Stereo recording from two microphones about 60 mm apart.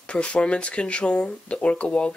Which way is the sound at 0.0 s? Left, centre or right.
Centre.